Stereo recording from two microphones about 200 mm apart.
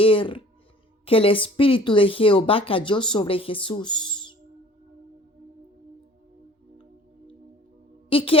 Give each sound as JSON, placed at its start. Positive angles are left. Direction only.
{"t": 0.0, "sound": "speech", "side_deg": 25}
{"t": 8.1, "sound": "speech", "side_deg": 25}